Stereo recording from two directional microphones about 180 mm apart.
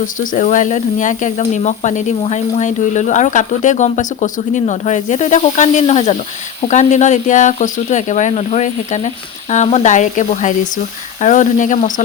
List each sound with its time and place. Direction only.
0.0 s speech: 50° left (ahead or behind)